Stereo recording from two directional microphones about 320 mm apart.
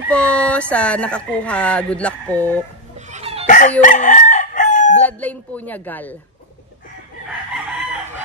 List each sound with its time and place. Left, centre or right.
0.1 s speech: centre
3.1 s chicken: centre
3.4 s chicken: left
3.8 s crowing: left
5.0 s speech: centre